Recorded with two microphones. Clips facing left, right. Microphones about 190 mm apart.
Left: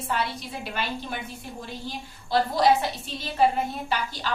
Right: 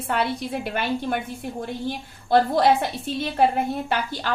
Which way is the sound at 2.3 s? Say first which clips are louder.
Right 3 dB; 55° right (ahead or behind).